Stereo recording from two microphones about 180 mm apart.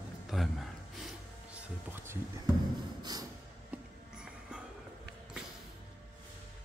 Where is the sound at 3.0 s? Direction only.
20° right (ahead or behind).